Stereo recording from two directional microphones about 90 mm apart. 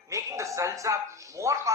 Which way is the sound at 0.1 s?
35° right (ahead or behind).